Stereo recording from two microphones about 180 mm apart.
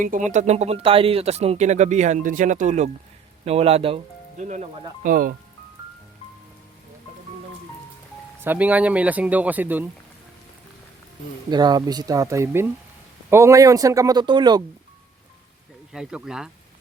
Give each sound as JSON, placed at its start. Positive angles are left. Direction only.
{"t": 0.0, "sound": "speech", "side_deg": -45}
{"t": 8.4, "sound": "speech", "side_deg": -10}
{"t": 11.5, "sound": "speech", "side_deg": -25}
{"t": 15.9, "sound": "speech", "side_deg": -5}